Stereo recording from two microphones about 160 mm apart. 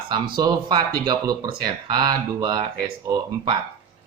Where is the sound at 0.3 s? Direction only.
25° right (ahead or behind).